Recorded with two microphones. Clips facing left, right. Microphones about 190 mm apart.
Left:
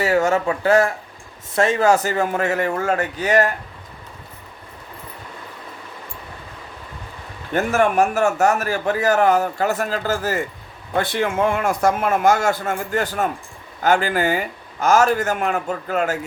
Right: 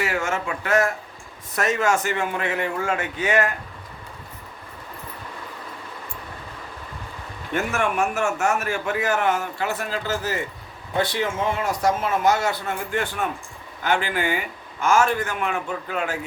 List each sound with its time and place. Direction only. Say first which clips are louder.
0.0 s a man's voice: left 8 dB; 35° left (ahead or behind)
7.5 s a man's voice: left 6 dB; 40° left (ahead or behind)